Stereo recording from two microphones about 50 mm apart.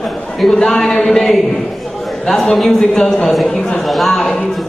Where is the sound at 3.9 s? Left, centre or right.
Centre.